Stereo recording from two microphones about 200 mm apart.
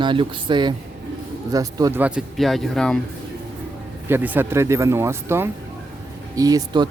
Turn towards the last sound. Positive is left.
turn(degrees=-20)  # may be behind; listen again after turning